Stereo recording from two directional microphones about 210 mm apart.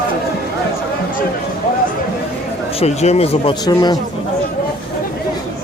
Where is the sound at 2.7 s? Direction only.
30° left (ahead or behind).